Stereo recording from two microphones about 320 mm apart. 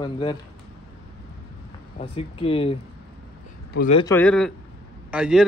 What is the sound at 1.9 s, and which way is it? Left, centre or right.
Speech, centre.